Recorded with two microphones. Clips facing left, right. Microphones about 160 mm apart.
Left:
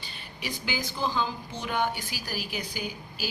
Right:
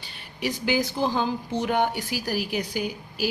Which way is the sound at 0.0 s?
65° right (ahead or behind).